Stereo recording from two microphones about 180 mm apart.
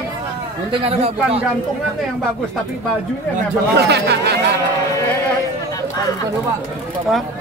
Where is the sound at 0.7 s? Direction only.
35° right (ahead or behind).